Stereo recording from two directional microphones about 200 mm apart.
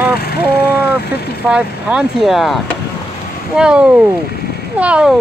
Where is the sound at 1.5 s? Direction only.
5° right (ahead or behind).